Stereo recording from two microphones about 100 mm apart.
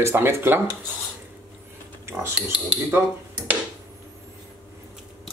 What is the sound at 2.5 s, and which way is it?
Speech, 10° right (ahead or behind).